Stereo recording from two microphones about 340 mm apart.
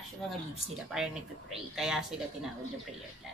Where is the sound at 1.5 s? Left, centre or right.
Centre.